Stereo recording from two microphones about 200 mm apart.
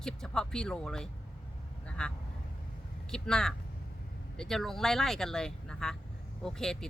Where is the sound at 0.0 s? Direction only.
5° left (ahead or behind).